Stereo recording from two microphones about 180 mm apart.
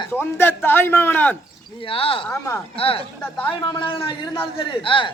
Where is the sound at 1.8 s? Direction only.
30° left (ahead or behind).